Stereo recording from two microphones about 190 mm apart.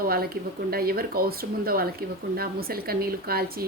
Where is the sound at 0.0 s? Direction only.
50° right (ahead or behind).